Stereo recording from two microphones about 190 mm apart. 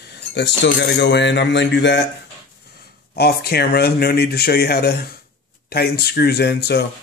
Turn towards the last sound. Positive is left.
turn(degrees=60)  # may be behind; listen again after turning